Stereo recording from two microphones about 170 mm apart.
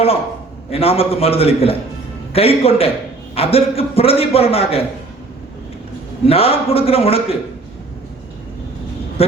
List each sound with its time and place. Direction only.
0.7 s a man's voice: 35° left (ahead or behind)
6.2 s a man's voice: 35° left (ahead or behind)